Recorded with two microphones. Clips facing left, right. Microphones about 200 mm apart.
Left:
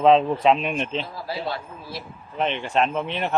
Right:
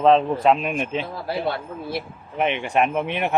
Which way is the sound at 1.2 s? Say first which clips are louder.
Right 4 dB; 55° right (ahead or behind).